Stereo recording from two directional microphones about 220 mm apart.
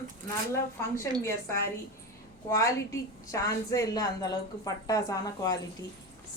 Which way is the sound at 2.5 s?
15° left (ahead or behind).